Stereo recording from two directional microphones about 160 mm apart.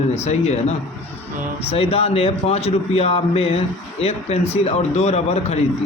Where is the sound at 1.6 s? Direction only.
40° left (ahead or behind).